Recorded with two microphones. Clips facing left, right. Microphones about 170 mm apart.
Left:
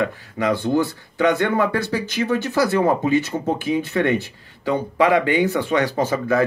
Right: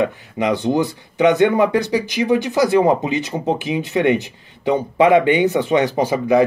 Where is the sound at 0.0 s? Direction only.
20° right (ahead or behind).